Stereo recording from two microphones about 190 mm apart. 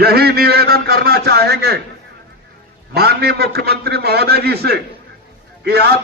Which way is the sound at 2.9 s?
55° right (ahead or behind).